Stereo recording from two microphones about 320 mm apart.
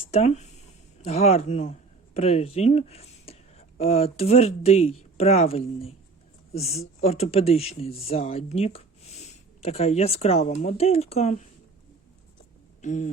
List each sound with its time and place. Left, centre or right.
0.1 s a sound: left
1.0 s speech: centre
12.8 s speech: left